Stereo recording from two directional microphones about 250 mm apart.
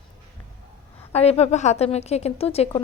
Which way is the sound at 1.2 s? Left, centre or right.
Left.